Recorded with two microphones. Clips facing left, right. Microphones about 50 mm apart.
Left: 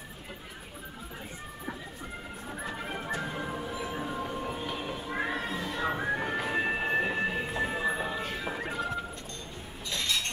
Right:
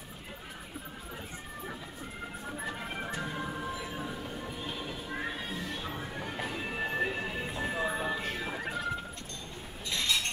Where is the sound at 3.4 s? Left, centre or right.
Left.